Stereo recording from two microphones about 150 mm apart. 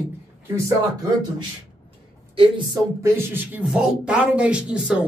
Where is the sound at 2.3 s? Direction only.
35° right (ahead or behind).